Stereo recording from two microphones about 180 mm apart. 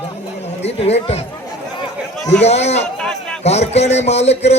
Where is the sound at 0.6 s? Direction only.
35° left (ahead or behind).